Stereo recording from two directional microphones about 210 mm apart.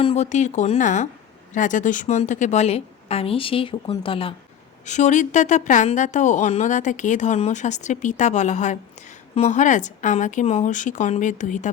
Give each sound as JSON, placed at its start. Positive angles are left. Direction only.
{"t": 0.0, "sound": "a woman's voice", "side_deg": 30}